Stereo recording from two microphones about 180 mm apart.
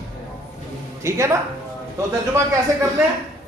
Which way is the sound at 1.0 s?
15° right (ahead or behind).